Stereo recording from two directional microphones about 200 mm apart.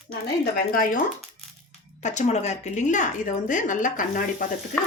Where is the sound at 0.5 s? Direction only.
45° left (ahead or behind).